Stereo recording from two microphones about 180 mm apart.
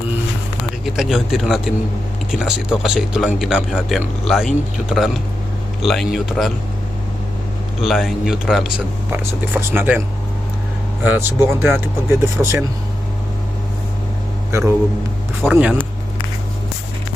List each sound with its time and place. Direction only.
0.9 s speech: centre (ahead or behind)
7.8 s speech: centre (ahead or behind)
11.0 s speech: 10° right (ahead or behind)
14.5 s speech: 15° right (ahead or behind)